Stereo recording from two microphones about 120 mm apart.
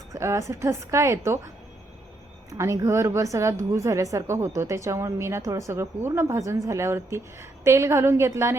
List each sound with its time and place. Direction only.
0.1 s speech: 25° right (ahead or behind)
2.5 s speech: 25° right (ahead or behind)